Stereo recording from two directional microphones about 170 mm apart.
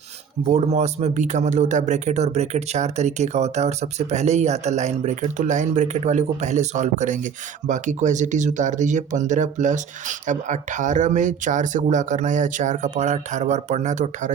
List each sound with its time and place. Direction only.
0.4 s a man's voice: 40° right (ahead or behind)